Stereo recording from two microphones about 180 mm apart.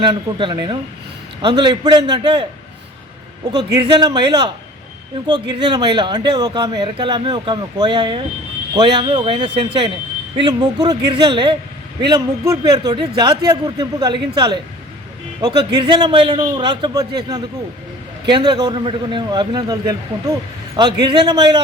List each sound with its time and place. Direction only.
0.0 s speech: 25° right (ahead or behind)
3.8 s speech: 25° right (ahead or behind)
21.0 s speech: 25° right (ahead or behind)